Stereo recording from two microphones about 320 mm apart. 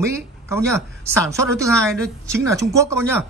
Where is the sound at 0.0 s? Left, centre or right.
Centre.